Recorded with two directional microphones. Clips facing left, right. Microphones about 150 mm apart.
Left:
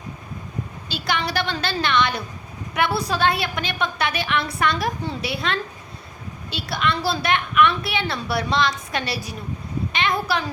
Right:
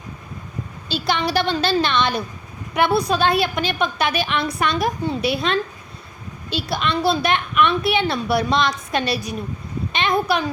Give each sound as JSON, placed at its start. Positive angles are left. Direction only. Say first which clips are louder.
{"t": 1.0, "sound": "a woman's voice", "louder": "right 4 dB", "side_deg": -20}
{"t": 6.6, "sound": "a woman's voice", "louder": "right 2 dB", "side_deg": -20}